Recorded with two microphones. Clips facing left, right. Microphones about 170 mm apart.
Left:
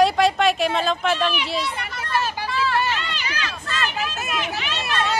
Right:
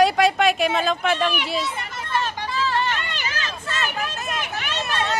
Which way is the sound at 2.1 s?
10° left (ahead or behind).